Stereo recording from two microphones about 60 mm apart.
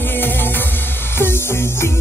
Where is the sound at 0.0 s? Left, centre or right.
Left.